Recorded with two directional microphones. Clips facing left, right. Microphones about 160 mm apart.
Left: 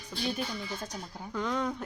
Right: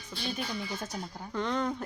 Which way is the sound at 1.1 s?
5° left (ahead or behind).